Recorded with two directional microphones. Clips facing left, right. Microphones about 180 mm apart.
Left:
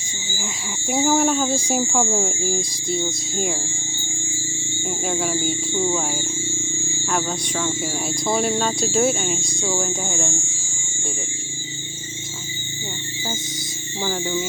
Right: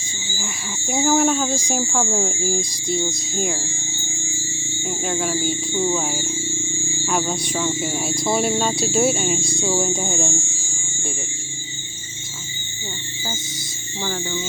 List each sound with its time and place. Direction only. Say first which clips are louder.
0.3 s speech: left 1 dB; 15° left (ahead or behind)
0.9 s speech: even; 5° left (ahead or behind)
2.0 s speech: even; centre (ahead or behind)
4.8 s speech: even; 5° right (ahead or behind)
10.0 s speech: right 2 dB; 20° right (ahead or behind)
14.0 s speech: left 2 dB; 15° left (ahead or behind)